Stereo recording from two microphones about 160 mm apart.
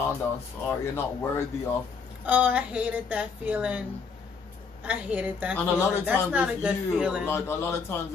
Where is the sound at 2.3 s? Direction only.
10° right (ahead or behind).